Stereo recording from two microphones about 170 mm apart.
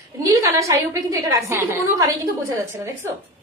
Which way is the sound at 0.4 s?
20° right (ahead or behind).